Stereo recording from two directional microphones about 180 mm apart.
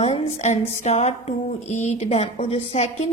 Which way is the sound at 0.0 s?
35° left (ahead or behind).